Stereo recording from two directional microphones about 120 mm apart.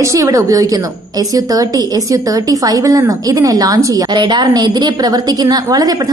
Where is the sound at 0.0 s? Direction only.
25° right (ahead or behind).